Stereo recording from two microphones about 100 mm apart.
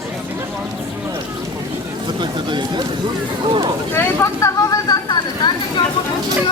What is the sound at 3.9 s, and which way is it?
Speech, 25° left (ahead or behind).